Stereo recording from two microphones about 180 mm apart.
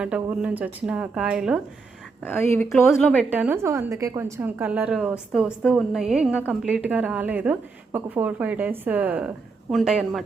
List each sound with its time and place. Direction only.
0.0 s a woman's voice: 5° right (ahead or behind)
2.2 s a woman's voice: 10° left (ahead or behind)
3.2 s a woman's voice: 10° right (ahead or behind)